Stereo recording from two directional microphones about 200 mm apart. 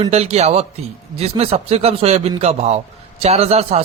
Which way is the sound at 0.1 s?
35° right (ahead or behind).